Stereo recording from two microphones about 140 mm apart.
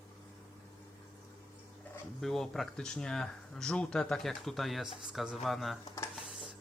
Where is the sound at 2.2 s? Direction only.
Centre (ahead or behind).